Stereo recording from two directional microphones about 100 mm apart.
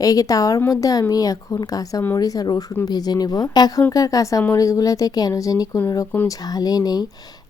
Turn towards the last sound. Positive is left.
turn(degrees=40)  # may be behind; listen again after turning